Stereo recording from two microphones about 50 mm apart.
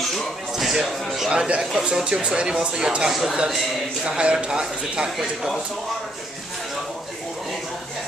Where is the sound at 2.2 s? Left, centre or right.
Centre.